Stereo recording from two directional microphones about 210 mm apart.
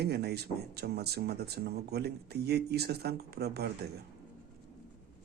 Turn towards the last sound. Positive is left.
turn(degrees=-50)  # may be behind; listen again after turning